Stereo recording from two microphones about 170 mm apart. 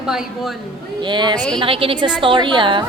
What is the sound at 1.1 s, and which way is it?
A woman's voice, 25° right (ahead or behind).